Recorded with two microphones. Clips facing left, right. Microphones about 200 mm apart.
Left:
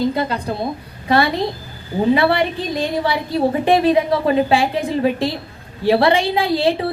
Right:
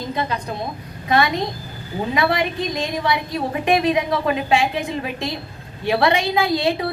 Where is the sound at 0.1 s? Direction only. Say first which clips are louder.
Left 4 dB; 30° left (ahead or behind).